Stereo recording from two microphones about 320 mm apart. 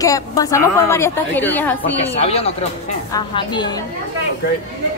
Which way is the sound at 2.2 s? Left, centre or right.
Centre.